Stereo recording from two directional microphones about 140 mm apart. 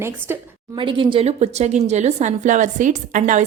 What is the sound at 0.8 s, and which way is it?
A woman's voice, 35° right (ahead or behind).